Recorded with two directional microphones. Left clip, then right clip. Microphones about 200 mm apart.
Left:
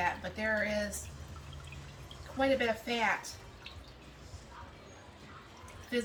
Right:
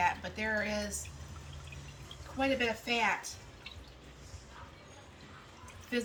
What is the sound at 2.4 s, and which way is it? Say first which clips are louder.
Speech: left 2 dB; 15° right (ahead or behind).